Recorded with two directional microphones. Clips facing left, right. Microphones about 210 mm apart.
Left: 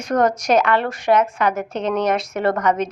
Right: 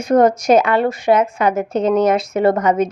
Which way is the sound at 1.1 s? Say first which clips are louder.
Right 2 dB; 20° right (ahead or behind).